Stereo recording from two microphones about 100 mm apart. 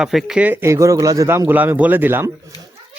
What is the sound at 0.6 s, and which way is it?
Speech, 30° right (ahead or behind).